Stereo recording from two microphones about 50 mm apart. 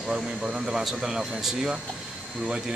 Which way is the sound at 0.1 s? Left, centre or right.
Centre.